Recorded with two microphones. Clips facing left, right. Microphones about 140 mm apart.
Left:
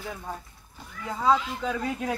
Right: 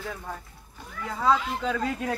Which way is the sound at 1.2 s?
15° left (ahead or behind).